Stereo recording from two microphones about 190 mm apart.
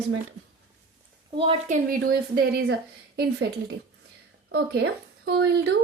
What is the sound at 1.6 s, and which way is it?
Speech, 40° right (ahead or behind).